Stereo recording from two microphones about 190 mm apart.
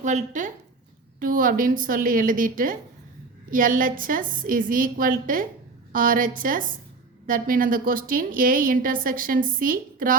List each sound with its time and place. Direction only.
0.0 s a woman's voice: 40° right (ahead or behind)